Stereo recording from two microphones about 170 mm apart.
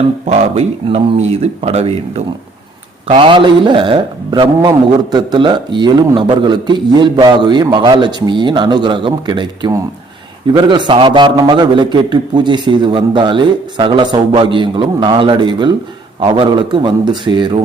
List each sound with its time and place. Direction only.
0.3 s a man's voice: 40° right (ahead or behind)